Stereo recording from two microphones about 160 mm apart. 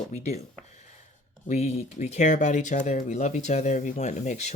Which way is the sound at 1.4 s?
45° left (ahead or behind).